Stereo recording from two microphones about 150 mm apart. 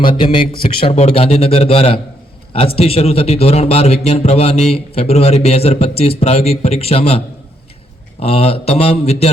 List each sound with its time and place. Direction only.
0.0 s a man's voice: 35° left (ahead or behind)
8.2 s speech: 40° left (ahead or behind)